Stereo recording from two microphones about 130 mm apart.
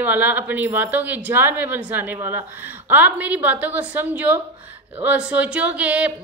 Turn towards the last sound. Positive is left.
turn(degrees=-10)  # may be behind; listen again after turning